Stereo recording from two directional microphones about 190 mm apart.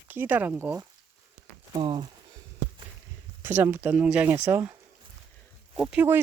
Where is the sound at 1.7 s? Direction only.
25° right (ahead or behind).